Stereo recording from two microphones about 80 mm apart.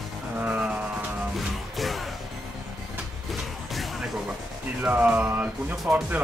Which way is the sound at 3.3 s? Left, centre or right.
Centre.